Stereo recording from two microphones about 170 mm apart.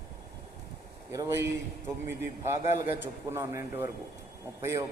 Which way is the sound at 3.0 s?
15° right (ahead or behind).